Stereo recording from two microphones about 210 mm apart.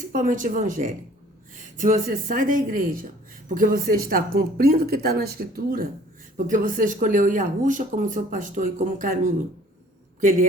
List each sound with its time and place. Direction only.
0.1 s speech: 40° right (ahead or behind)